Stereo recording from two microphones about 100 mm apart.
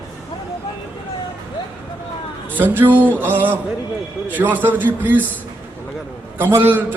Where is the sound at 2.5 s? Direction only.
20° right (ahead or behind).